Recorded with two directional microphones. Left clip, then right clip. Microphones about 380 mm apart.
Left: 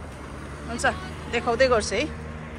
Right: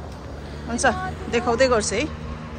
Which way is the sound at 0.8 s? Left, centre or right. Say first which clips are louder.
Right 4 dB; centre.